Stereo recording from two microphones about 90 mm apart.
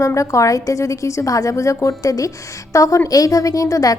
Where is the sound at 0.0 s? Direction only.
35° left (ahead or behind).